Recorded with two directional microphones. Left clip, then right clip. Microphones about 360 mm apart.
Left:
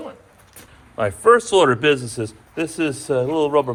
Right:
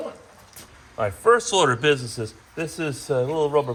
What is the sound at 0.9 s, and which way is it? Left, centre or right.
A man's voice, left.